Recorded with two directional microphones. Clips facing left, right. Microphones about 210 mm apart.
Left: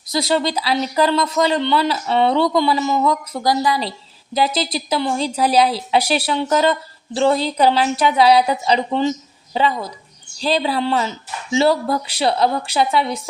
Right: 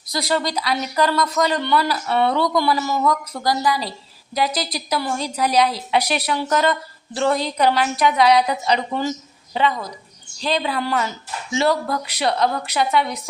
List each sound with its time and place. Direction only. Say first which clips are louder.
0.3 s a woman's voice: left 2 dB; 25° left (ahead or behind)